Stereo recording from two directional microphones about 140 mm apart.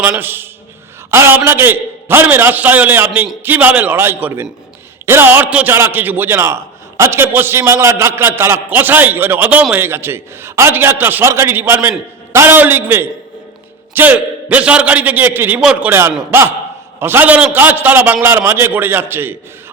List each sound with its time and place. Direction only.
0.0 s a man's voice: 10° right (ahead or behind)